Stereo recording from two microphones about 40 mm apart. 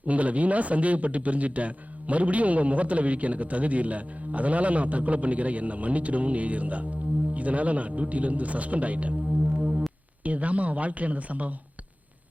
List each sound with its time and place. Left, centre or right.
0.0 s a man's voice: right
9.6 s music: right
10.2 s a man's voice: right